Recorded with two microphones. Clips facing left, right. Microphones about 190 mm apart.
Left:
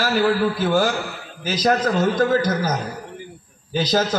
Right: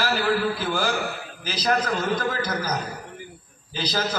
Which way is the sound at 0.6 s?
45° left (ahead or behind).